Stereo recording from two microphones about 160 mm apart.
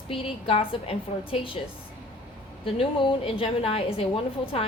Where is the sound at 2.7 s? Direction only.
35° left (ahead or behind).